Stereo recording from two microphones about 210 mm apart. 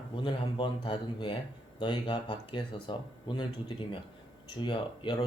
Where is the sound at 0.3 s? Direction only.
25° left (ahead or behind).